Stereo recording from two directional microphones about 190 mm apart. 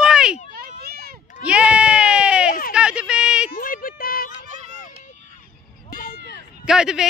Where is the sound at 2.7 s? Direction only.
5° right (ahead or behind).